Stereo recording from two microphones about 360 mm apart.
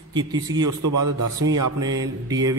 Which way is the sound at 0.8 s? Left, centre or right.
Right.